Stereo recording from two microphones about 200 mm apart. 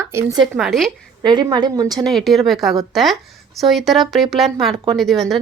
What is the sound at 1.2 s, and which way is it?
Speech, 20° right (ahead or behind).